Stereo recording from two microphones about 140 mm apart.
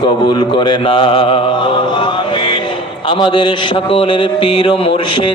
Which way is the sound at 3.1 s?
35° left (ahead or behind).